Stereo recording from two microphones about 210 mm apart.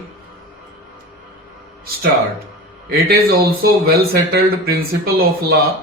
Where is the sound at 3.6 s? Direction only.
45° right (ahead or behind).